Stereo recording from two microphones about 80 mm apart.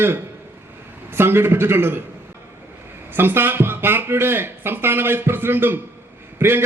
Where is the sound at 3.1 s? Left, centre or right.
Right.